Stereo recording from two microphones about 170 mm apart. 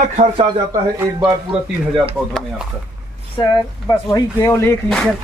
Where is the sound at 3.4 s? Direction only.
20° left (ahead or behind).